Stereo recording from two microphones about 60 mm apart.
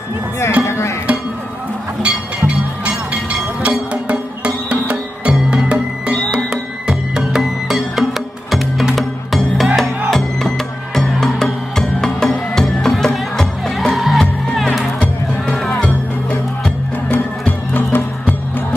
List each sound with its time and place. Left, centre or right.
0.7 s music: left
2.0 s music: centre
15.8 s music: left
17.1 s music: left